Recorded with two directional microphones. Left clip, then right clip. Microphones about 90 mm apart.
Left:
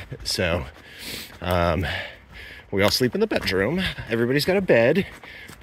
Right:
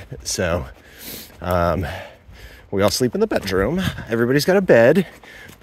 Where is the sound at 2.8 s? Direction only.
50° right (ahead or behind).